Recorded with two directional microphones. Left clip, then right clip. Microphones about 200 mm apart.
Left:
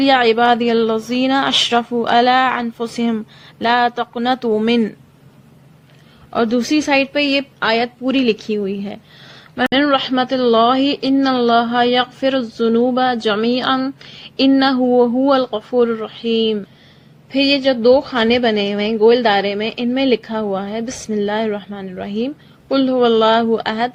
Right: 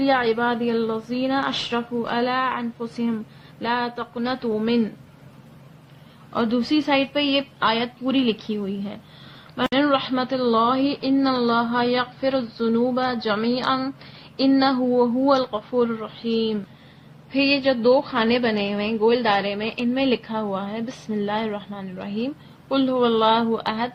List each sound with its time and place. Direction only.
0.0 s a woman's voice: 50° left (ahead or behind)
6.3 s a woman's voice: 40° left (ahead or behind)